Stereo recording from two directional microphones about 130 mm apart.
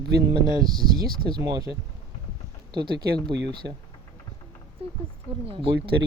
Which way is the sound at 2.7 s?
35° right (ahead or behind).